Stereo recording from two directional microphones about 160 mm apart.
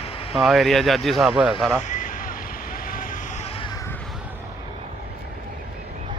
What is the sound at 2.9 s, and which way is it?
Vehicle, 60° left (ahead or behind).